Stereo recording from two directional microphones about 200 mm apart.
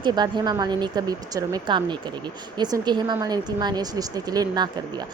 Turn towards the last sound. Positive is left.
turn(degrees=-20)  # may be behind; listen again after turning